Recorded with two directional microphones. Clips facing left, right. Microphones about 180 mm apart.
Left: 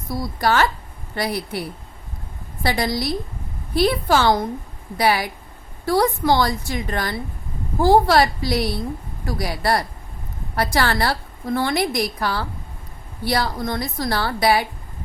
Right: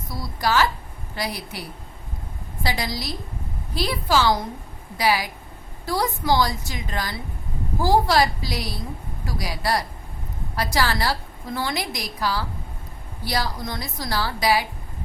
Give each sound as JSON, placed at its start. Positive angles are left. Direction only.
{"t": 0.2, "sound": "a woman's voice", "side_deg": 55}
{"t": 2.6, "sound": "a woman's voice", "side_deg": 55}